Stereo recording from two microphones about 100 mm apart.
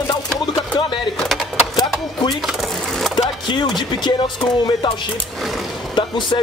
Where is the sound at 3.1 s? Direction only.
45° left (ahead or behind).